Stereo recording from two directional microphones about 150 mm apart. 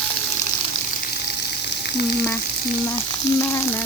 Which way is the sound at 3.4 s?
20° left (ahead or behind).